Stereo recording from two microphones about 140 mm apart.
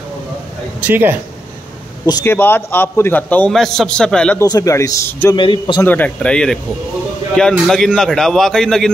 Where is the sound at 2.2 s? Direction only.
15° left (ahead or behind).